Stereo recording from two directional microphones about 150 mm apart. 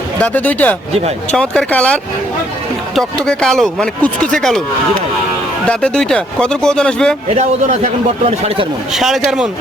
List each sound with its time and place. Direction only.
0.2 s speech: 10° left (ahead or behind)
5.6 s speech: 5° left (ahead or behind)
7.3 s a man's voice: 50° right (ahead or behind)
8.9 s speech: centre (ahead or behind)